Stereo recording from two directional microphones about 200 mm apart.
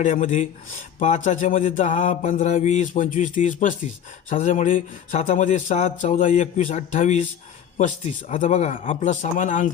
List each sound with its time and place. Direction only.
0.0 s mantra: 40° left (ahead or behind)